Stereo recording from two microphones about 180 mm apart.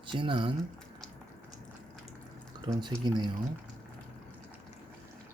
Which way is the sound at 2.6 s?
25° right (ahead or behind).